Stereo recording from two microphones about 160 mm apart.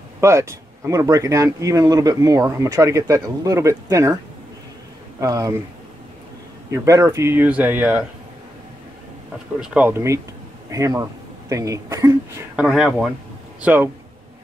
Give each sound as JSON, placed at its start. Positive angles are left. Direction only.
{"t": 0.2, "sound": "speech", "side_deg": -15}
{"t": 5.2, "sound": "speech", "side_deg": -20}
{"t": 6.7, "sound": "speech", "side_deg": -20}
{"t": 9.6, "sound": "speech", "side_deg": -10}
{"t": 12.5, "sound": "speech", "side_deg": -5}